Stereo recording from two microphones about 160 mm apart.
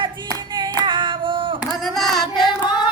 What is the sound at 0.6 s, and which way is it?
Hands, 30° right (ahead or behind).